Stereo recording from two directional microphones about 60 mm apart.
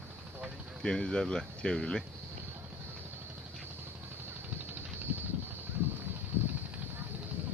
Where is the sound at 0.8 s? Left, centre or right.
Centre.